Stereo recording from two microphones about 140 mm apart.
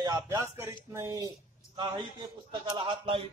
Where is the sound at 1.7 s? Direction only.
35° right (ahead or behind).